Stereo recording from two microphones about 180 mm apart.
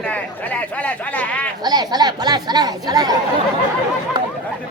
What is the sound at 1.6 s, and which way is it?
Speech, 20° right (ahead or behind).